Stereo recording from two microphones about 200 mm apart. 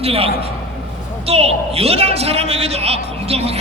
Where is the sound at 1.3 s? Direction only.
30° right (ahead or behind).